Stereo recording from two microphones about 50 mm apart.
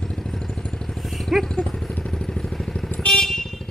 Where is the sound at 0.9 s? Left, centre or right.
Centre.